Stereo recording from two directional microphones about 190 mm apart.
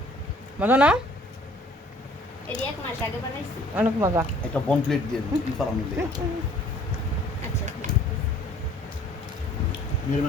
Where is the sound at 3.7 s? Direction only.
10° right (ahead or behind).